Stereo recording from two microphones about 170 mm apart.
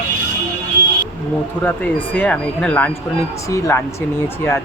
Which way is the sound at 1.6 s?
10° left (ahead or behind).